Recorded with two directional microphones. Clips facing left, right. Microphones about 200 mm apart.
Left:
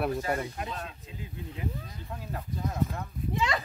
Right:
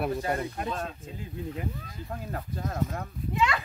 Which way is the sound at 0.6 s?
45° right (ahead or behind).